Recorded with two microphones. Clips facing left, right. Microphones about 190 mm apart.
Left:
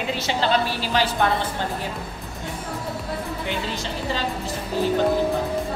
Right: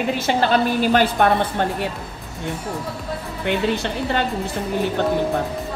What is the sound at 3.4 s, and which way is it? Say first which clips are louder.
Speech: right 7 dB; 60° right (ahead or behind).